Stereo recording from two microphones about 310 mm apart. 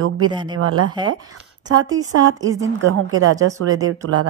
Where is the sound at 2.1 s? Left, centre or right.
Right.